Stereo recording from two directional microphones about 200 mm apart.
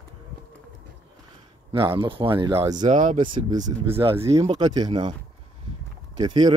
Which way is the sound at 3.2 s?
20° right (ahead or behind).